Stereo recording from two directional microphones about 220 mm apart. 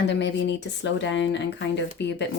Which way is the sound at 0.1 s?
55° left (ahead or behind).